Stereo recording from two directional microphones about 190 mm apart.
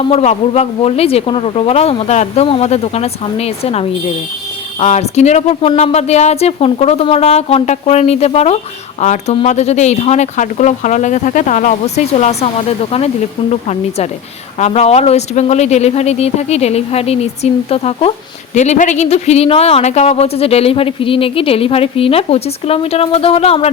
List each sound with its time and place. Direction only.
0.0 s speech: 35° left (ahead or behind)